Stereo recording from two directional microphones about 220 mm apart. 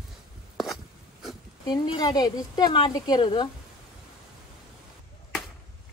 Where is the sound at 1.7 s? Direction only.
20° left (ahead or behind).